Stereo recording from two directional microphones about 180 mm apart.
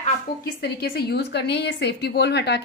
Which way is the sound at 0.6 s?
60° left (ahead or behind).